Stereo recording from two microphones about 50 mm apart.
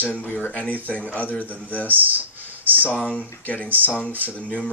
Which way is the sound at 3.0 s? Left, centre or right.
Left.